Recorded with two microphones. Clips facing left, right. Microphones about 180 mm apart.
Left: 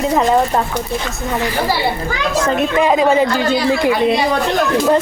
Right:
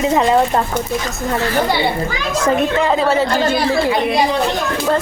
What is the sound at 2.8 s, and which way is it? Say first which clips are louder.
Speech: left 2 dB; 15° left (ahead or behind).